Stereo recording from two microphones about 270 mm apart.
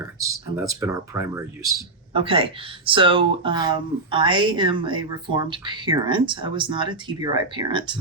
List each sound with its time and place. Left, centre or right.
0.0 s speech: centre